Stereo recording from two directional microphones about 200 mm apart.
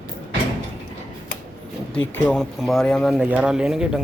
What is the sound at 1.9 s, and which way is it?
Speech, 10° left (ahead or behind).